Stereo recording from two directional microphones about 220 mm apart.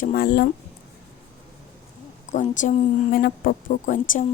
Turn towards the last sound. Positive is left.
turn(degrees=35)  # may be behind; listen again after turning